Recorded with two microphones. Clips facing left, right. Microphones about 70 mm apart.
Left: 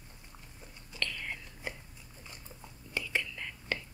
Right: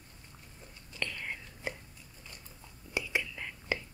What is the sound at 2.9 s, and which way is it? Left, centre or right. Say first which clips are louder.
Whispering: right 1 dB; centre.